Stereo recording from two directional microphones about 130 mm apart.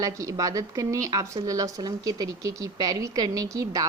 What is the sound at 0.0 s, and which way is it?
A woman's voice, 25° right (ahead or behind).